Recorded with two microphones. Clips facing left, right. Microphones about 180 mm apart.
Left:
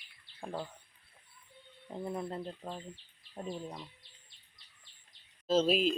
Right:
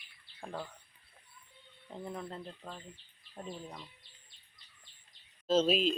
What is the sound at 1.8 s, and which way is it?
Speech, 10° left (ahead or behind).